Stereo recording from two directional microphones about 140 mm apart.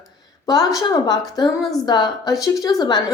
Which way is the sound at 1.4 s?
30° left (ahead or behind).